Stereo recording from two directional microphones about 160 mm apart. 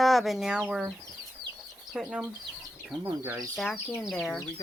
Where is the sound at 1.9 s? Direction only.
Centre (ahead or behind).